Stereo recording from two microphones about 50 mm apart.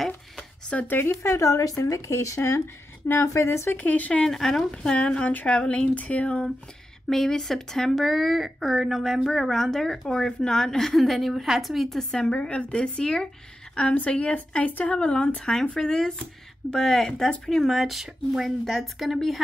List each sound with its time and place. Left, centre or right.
0.4 s a sound: centre
1.0 s speech: left
3.7 s speech: left
4.2 s speech: centre
4.9 s a woman's voice: left
7.1 s speech: centre
12.3 s a woman's voice: left
15.0 s speech: centre